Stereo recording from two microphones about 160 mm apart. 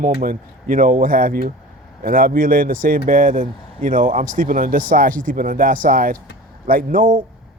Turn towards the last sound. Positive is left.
turn(degrees=-60)  # may be behind; listen again after turning